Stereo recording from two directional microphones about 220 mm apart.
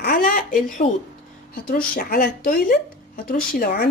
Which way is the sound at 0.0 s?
40° left (ahead or behind).